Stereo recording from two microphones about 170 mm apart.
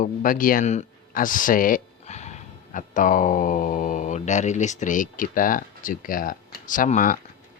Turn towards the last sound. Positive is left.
turn(degrees=50)  # may be behind; listen again after turning